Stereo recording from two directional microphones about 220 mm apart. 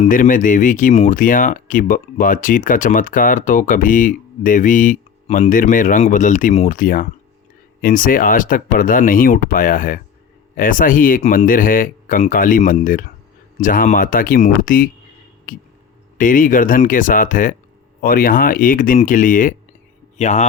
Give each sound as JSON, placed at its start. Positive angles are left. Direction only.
{"t": 0.0, "sound": "speech", "side_deg": 35}